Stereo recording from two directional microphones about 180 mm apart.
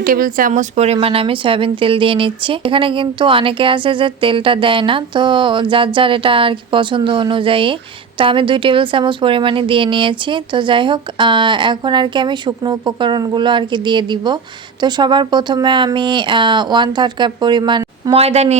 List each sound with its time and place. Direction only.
0.0 s speech: 50° right (ahead or behind); by 18.5 s 35° right (ahead or behind)